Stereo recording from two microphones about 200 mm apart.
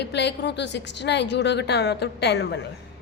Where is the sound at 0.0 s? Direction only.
60° left (ahead or behind).